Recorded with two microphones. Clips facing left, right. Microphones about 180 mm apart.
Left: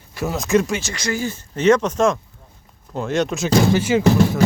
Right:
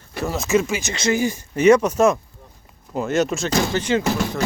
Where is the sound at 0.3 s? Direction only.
5° right (ahead or behind).